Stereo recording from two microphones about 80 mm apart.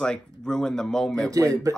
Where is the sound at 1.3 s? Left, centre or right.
Right.